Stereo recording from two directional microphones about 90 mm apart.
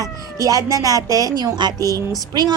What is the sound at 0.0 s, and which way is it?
A woman's voice, 40° right (ahead or behind).